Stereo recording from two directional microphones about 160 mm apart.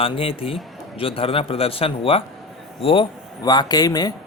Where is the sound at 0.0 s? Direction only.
35° left (ahead or behind).